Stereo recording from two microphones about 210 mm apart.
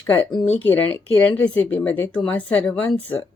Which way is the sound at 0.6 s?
10° left (ahead or behind).